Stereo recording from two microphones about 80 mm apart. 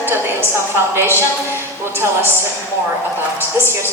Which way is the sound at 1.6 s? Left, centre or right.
Right.